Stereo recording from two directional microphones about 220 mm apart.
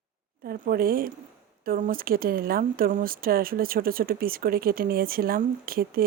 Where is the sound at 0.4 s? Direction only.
40° right (ahead or behind).